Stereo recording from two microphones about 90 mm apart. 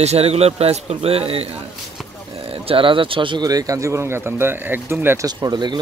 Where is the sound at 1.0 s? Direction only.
90° right; by 3.4 s 65° right (ahead or behind).